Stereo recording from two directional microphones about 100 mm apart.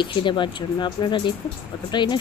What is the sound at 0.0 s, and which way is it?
Speech, 50° left (ahead or behind).